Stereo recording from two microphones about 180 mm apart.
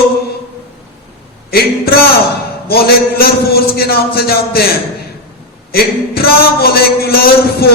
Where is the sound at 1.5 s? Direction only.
60° left (ahead or behind).